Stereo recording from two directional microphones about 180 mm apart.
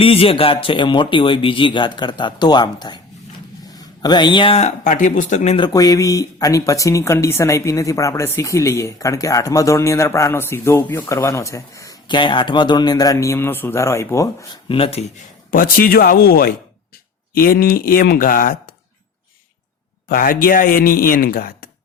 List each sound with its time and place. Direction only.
0.0 s speech: 30° left (ahead or behind)
4.0 s speech: 25° left (ahead or behind); by 5.5 s 45° left (ahead or behind)
5.5 s speech: 20° left (ahead or behind)
14.7 s speech: 35° left (ahead or behind)
15.4 s speech: 55° left (ahead or behind)
20.1 s speech: 55° left (ahead or behind)